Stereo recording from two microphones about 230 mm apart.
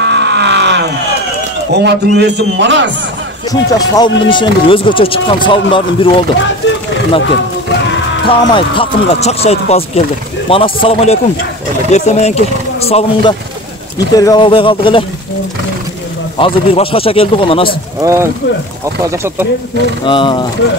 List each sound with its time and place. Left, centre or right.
0.0 s a sound: right
1.7 s a man's voice: right
3.7 s speech: centre
6.4 s speech: left
8.3 s speech: left
16.3 s speech: left
18.0 s speech: centre
20.1 s speech: left